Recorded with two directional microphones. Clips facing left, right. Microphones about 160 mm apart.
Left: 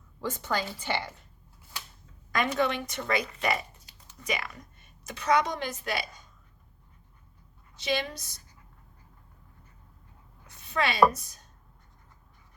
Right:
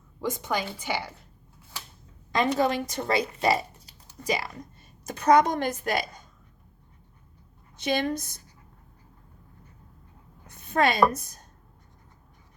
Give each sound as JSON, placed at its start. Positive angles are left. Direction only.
{"t": 0.2, "sound": "a woman's voice", "side_deg": -15}
{"t": 2.3, "sound": "a woman's voice", "side_deg": -35}
{"t": 7.8, "sound": "a woman's voice", "side_deg": -50}
{"t": 10.5, "sound": "a woman's voice", "side_deg": -50}